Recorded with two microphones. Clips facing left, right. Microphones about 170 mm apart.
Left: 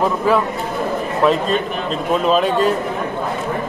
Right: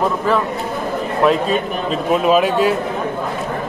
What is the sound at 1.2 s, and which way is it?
Speech, 5° right (ahead or behind).